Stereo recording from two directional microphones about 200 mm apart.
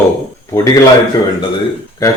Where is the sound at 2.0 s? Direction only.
15° left (ahead or behind).